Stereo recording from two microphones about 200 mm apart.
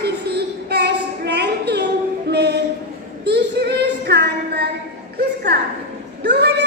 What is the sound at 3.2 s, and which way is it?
Child singing, 55° right (ahead or behind).